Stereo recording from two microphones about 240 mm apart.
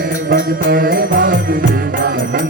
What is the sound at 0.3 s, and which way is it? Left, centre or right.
Music, right.